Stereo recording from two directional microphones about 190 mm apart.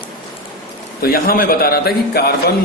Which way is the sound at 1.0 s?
50° left (ahead or behind).